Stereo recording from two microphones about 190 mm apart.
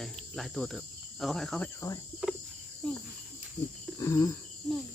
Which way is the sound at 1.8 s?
15° left (ahead or behind).